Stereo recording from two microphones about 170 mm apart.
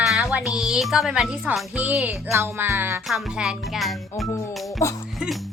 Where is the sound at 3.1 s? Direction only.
Centre (ahead or behind).